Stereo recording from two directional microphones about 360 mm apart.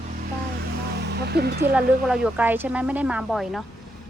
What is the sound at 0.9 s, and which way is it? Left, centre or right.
Speech, right.